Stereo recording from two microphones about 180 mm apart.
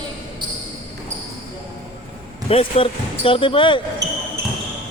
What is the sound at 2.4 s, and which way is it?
Speech, 30° left (ahead or behind).